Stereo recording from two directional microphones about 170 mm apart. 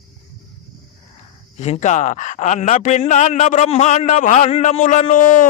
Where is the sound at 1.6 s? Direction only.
40° left (ahead or behind).